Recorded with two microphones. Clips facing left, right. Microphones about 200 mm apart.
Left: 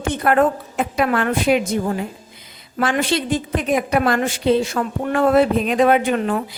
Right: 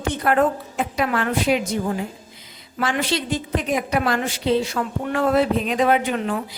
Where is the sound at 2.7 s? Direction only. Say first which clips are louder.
Left 3 dB; 50° left (ahead or behind).